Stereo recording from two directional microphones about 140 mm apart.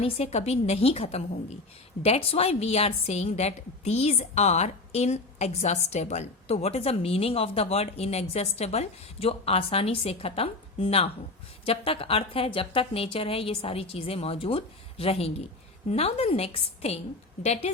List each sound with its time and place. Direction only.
0.0 s a woman's voice: 50° left (ahead or behind)